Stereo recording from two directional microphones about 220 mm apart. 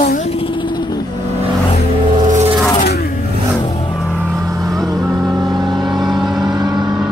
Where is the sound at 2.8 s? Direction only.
45° left (ahead or behind).